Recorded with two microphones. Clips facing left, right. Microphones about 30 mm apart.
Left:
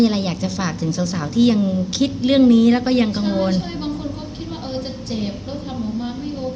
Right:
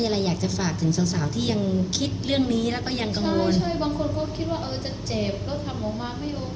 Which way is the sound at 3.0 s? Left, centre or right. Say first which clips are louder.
Left 6 dB; left.